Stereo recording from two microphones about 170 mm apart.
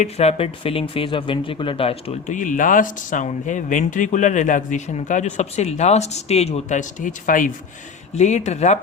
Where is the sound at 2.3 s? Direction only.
50° left (ahead or behind).